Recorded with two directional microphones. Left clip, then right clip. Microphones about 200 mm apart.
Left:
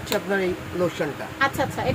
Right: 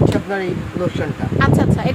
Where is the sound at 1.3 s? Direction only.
20° right (ahead or behind).